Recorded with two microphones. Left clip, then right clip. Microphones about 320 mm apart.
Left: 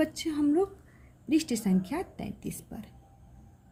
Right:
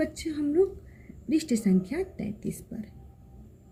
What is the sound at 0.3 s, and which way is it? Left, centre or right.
A woman's voice, left.